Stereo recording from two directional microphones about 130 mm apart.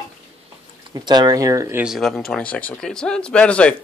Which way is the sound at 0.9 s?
30° right (ahead or behind).